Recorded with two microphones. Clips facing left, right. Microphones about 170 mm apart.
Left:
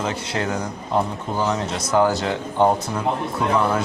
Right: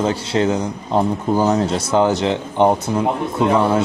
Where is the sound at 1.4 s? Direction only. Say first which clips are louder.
Right 5 dB; 40° right (ahead or behind).